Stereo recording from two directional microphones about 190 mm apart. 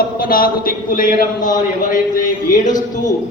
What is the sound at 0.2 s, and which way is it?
A man's voice, 50° left (ahead or behind).